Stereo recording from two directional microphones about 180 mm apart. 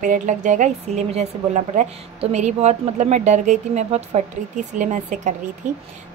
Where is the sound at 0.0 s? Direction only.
45° right (ahead or behind).